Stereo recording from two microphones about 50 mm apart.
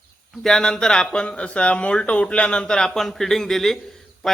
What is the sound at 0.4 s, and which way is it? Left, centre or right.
A man's voice, centre.